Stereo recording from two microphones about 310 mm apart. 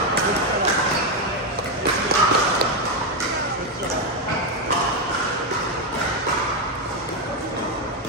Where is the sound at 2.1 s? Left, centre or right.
Right.